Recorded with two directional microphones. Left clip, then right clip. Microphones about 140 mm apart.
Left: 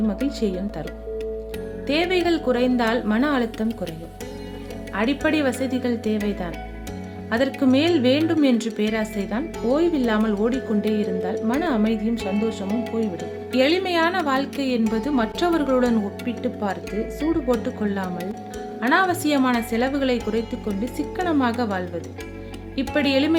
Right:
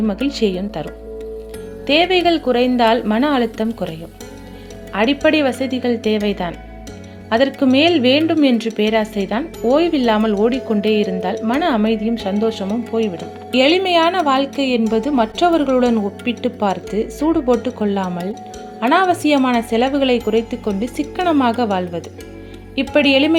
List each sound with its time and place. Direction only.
0.1 s speech: 15° right (ahead or behind)
1.9 s speech: 15° right (ahead or behind)
5.2 s speech: 15° right (ahead or behind)